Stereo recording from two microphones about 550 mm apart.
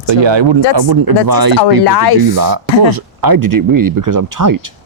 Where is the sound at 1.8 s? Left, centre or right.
Left.